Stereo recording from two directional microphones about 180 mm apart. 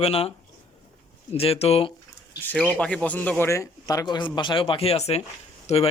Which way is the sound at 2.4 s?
10° left (ahead or behind).